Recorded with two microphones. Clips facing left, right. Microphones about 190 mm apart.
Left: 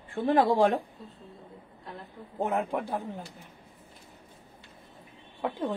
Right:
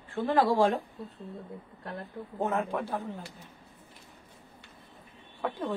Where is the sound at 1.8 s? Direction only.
60° right (ahead or behind).